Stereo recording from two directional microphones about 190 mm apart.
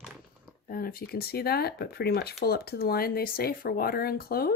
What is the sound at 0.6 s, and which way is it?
Speech, 50° left (ahead or behind).